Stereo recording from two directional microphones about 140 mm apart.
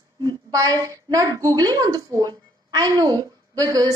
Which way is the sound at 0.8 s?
25° right (ahead or behind).